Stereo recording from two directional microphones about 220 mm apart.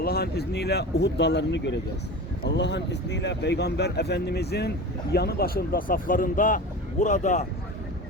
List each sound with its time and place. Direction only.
0.0 s speech: 45° left (ahead or behind)